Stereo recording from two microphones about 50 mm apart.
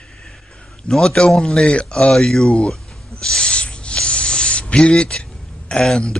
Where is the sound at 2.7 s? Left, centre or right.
Centre.